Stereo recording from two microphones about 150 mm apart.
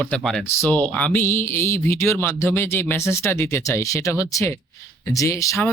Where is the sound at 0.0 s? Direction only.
5° left (ahead or behind).